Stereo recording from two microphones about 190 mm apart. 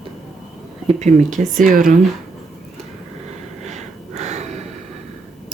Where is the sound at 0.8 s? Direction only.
40° right (ahead or behind).